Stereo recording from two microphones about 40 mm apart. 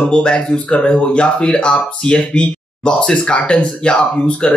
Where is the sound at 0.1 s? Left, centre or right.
Left.